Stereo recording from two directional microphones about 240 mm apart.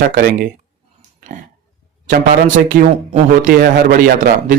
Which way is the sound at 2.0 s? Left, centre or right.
Right.